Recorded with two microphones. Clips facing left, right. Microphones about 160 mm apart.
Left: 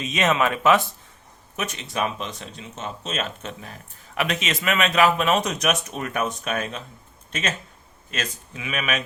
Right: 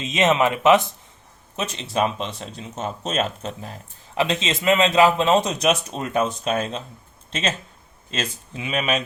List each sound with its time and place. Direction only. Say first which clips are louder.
0.0 s speech: right 3 dB; 25° right (ahead or behind)